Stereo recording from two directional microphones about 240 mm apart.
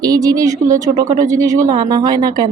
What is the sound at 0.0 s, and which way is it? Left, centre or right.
Speech, centre.